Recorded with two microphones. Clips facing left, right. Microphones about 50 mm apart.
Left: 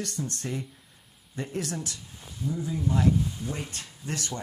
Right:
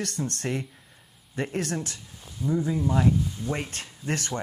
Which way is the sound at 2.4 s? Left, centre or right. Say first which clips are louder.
Right 4 dB; right.